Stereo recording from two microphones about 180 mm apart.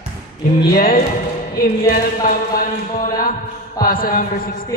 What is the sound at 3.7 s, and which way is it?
Speech, 55° left (ahead or behind).